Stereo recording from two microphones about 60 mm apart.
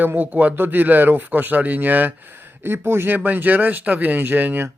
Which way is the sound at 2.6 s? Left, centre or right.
Right.